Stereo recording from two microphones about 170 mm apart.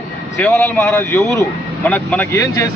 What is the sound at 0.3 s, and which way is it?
A man's voice, 10° left (ahead or behind).